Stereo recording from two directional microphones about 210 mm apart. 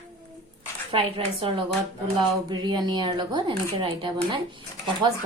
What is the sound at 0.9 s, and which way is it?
Speech, 25° right (ahead or behind).